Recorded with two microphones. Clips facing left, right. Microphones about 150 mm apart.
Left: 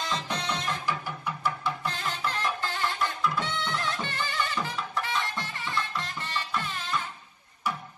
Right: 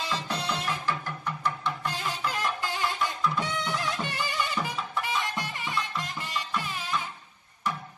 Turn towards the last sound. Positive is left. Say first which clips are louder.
# even
turn(degrees=-10)  # may be behind; listen again after turning